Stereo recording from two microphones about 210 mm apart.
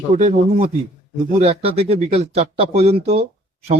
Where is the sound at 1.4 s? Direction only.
30° right (ahead or behind).